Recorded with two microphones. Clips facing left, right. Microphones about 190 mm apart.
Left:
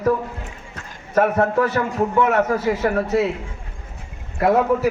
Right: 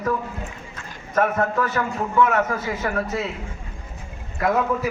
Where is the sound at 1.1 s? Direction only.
30° left (ahead or behind).